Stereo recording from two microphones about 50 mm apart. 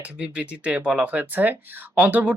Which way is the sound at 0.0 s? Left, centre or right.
Right.